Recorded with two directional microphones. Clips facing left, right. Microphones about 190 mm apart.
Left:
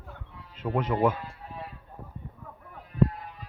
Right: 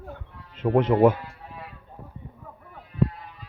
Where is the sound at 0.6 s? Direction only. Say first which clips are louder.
Right 8 dB; 25° right (ahead or behind).